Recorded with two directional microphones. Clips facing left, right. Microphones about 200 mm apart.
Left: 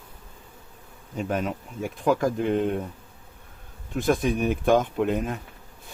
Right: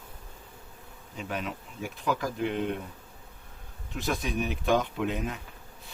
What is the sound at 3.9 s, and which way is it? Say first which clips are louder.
Speech: left 8 dB; 50° left (ahead or behind).